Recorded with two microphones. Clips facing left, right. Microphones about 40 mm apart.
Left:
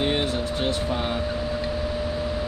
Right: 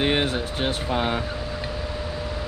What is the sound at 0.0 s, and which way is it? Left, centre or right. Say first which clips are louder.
Speech: right 1 dB; right.